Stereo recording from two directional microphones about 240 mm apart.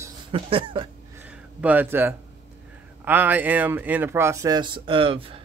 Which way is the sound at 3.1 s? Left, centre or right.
Centre.